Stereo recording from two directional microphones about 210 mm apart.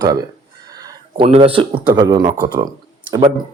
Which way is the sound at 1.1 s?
25° right (ahead or behind).